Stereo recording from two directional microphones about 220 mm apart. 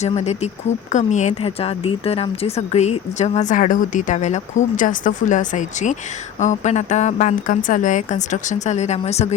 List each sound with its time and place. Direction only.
0.0 s speech: 30° left (ahead or behind)